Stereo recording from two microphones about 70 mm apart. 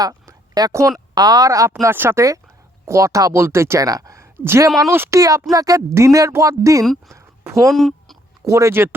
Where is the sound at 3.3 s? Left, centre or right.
Right.